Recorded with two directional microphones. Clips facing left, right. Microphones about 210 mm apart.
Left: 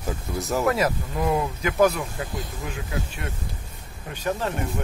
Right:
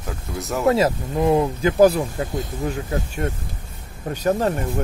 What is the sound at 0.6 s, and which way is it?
Speech, 25° right (ahead or behind).